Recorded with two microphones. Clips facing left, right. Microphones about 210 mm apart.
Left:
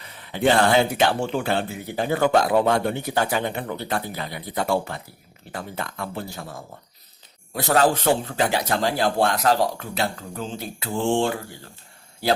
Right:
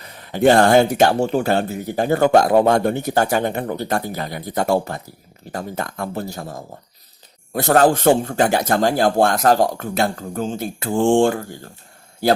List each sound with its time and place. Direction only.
0.0 s speech: 45° right (ahead or behind)